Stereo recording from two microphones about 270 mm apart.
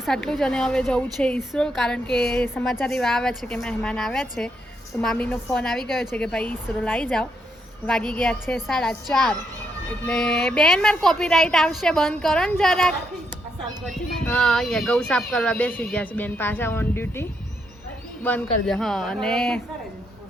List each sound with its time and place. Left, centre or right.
0.0 s a woman's voice: centre
13.9 s a woman's voice: centre